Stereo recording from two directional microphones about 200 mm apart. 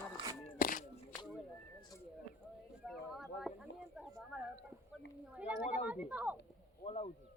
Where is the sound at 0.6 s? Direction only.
45° left (ahead or behind).